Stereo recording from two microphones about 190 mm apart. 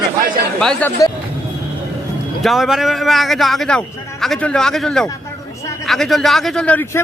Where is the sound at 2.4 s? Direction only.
Centre (ahead or behind).